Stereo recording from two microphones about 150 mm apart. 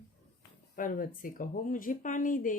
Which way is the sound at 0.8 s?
65° left (ahead or behind).